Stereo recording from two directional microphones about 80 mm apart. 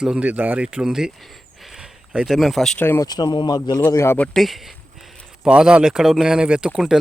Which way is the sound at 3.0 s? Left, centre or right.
Left.